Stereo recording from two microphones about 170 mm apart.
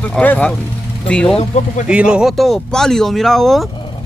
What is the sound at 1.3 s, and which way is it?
Speech, 45° left (ahead or behind).